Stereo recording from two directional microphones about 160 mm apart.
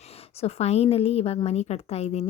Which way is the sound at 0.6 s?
40° left (ahead or behind).